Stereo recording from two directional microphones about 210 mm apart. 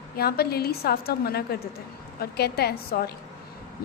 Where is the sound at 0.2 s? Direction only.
50° left (ahead or behind).